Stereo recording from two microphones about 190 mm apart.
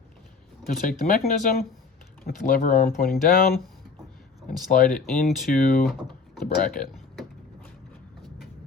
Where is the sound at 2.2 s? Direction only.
45° left (ahead or behind).